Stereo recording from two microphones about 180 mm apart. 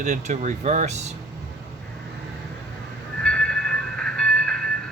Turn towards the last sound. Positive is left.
turn(degrees=5)  # may be behind; listen again after turning